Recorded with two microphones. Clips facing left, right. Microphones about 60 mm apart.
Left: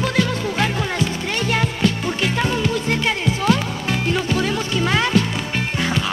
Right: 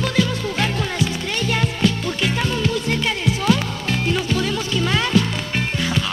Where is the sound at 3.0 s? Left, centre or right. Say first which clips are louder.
Left 1 dB; left.